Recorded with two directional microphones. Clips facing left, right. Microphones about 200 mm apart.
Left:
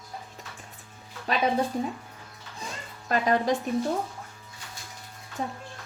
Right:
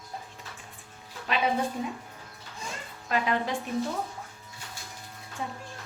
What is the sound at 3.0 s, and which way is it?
Speech, 40° left (ahead or behind).